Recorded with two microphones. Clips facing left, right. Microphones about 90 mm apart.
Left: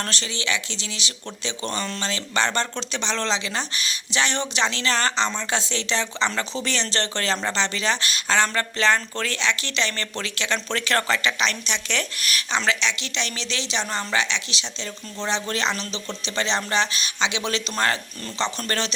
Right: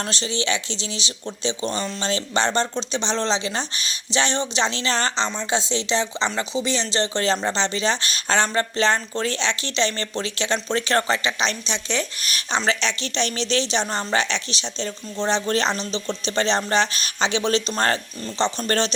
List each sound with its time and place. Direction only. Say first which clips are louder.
0.0 s speech: right 3 dB; 20° right (ahead or behind)
2.0 s speech: right 3 dB; 25° right (ahead or behind)